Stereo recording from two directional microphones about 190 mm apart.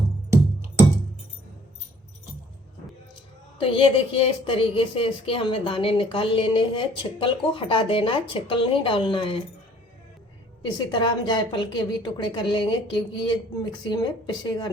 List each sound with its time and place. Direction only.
3.6 s speech: 30° left (ahead or behind)
10.8 s speech: 25° left (ahead or behind)